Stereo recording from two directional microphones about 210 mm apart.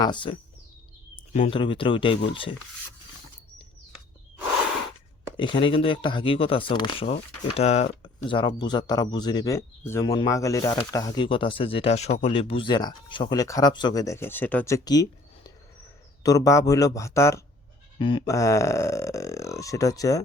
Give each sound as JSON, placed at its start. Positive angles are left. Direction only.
{"t": 0.0, "sound": "speech", "side_deg": 20}
{"t": 5.4, "sound": "speech", "side_deg": 25}
{"t": 16.2, "sound": "speech", "side_deg": 15}